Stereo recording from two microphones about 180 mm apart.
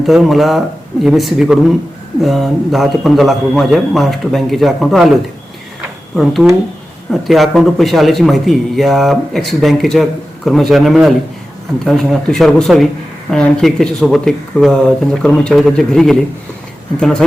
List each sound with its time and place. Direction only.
0.0 s speech: centre (ahead or behind)
6.1 s speech: centre (ahead or behind)